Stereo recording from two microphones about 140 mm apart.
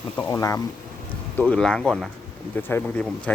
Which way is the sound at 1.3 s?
10° left (ahead or behind).